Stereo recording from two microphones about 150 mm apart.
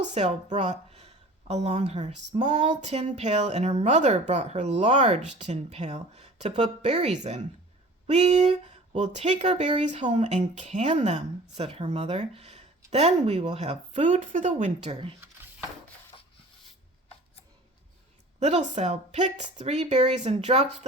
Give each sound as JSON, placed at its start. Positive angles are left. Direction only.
{"t": 0.0, "sound": "speech", "side_deg": -50}
{"t": 18.3, "sound": "speech", "side_deg": -50}